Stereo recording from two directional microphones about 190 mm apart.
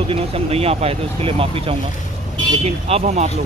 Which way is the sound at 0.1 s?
30° right (ahead or behind).